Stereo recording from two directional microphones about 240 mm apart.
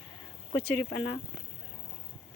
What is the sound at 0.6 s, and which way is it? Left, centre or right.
Speech, centre.